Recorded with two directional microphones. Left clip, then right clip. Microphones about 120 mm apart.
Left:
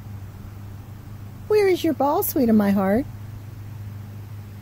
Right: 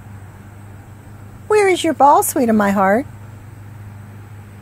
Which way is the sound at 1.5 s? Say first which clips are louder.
Right 5 dB; 20° left (ahead or behind).